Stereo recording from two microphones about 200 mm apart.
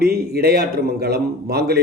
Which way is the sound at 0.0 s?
55° right (ahead or behind).